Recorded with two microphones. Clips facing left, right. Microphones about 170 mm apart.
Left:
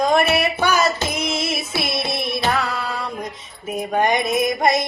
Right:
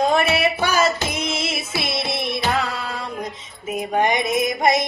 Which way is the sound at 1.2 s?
25° right (ahead or behind).